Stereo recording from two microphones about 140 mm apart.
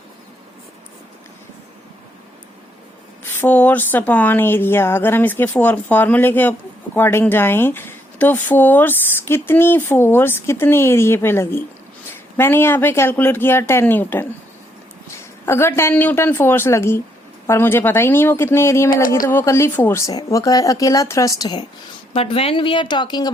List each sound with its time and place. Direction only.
3.4 s speech: 10° left (ahead or behind)
19.0 s speech: 85° left
19.3 s speech: 20° left (ahead or behind)
22.1 s speech: 45° left (ahead or behind)